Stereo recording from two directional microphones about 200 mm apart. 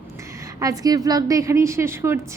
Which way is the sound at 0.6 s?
15° right (ahead or behind).